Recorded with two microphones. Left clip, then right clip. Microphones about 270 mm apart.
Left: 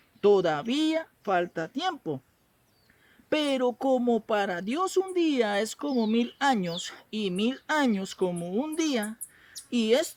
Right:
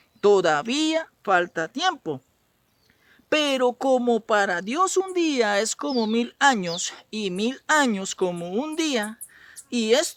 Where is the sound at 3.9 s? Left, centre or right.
Right.